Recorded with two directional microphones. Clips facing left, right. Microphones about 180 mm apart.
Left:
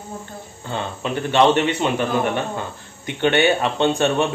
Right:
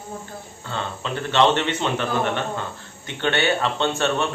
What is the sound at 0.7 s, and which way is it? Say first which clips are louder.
Speech: left 3 dB; 15° left (ahead or behind).